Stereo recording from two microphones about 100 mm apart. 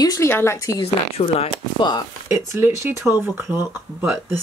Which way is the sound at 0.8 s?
90° left.